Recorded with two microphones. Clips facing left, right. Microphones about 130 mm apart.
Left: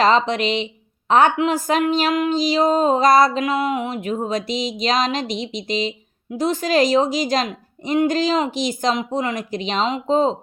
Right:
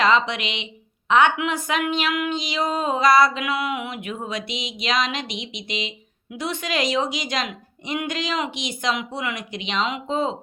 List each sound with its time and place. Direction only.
0.0 s a woman's voice: 40° left (ahead or behind)